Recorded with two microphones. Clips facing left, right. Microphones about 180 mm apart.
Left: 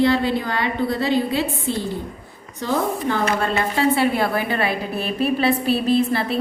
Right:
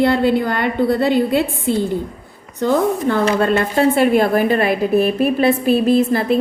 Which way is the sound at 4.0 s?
50° right (ahead or behind).